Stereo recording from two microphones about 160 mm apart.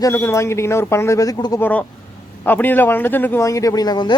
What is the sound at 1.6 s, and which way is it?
A man's voice, 10° left (ahead or behind).